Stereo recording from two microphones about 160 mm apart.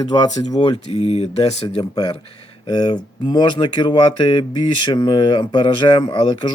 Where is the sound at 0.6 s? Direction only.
40° left (ahead or behind).